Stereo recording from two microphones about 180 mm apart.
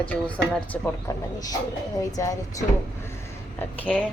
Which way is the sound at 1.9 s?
20° left (ahead or behind).